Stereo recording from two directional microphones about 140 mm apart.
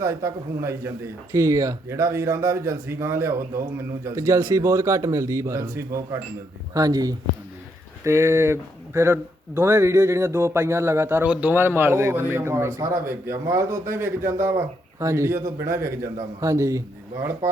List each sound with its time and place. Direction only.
0.0 s speech: 20° right (ahead or behind)